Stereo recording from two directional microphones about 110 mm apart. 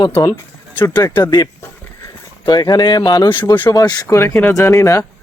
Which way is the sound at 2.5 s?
35° left (ahead or behind).